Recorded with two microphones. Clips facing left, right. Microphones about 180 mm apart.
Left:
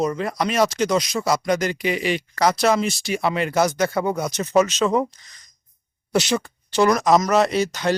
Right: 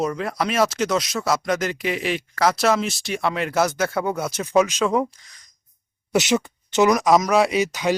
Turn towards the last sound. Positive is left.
turn(degrees=-10)  # may be behind; listen again after turning